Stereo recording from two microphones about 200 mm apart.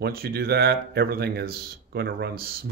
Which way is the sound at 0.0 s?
50° right (ahead or behind).